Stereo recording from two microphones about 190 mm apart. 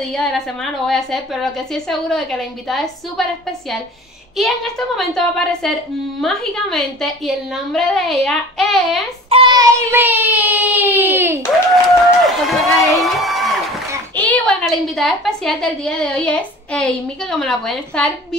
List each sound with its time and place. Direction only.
0.0 s a woman's voice: centre (ahead or behind)
9.3 s child singing: 25° right (ahead or behind)
9.9 s speech: 10° right (ahead or behind)
12.3 s a sound: centre (ahead or behind)
14.1 s a woman's voice: 10° left (ahead or behind)